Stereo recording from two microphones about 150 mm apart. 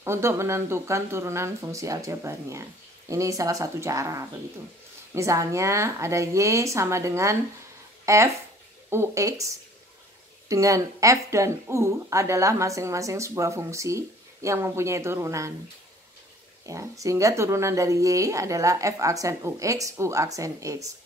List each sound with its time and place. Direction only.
0.0 s speech: 15° right (ahead or behind)
8.0 s a sound: 20° right (ahead or behind)
8.9 s speech: 20° right (ahead or behind)
10.5 s speech: 20° right (ahead or behind)
16.6 s speech: 20° right (ahead or behind)